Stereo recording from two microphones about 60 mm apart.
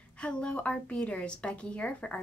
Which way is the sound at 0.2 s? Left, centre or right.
Centre.